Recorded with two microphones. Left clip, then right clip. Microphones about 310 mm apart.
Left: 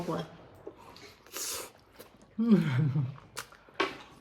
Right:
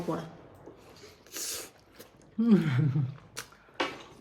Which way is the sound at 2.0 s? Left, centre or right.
Centre.